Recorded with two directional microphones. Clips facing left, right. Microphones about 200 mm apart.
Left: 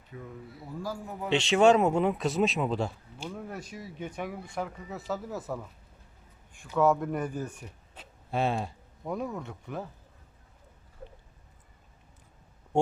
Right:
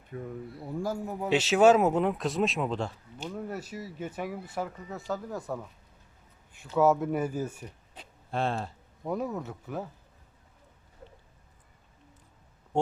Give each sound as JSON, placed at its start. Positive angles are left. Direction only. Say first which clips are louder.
{"t": 0.1, "sound": "a man's voice", "louder": "right 5 dB", "side_deg": -45}
{"t": 1.3, "sound": "speech", "louder": "right 1 dB", "side_deg": -5}
{"t": 3.3, "sound": "speech", "louder": "right 6 dB", "side_deg": -5}
{"t": 6.7, "sound": "speech", "louder": "right 1 dB", "side_deg": -5}
{"t": 7.6, "sound": "speech", "louder": "right 2 dB", "side_deg": 5}
{"t": 9.0, "sound": "speech", "louder": "right 2 dB", "side_deg": -5}